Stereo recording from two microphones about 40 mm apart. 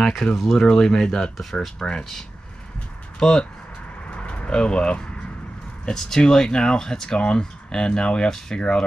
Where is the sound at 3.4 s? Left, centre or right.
Left.